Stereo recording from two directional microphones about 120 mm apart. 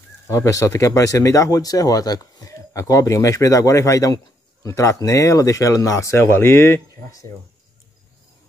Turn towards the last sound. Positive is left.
turn(degrees=25)  # may be behind; listen again after turning